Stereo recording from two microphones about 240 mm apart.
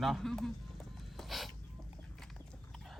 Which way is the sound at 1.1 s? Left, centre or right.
Centre.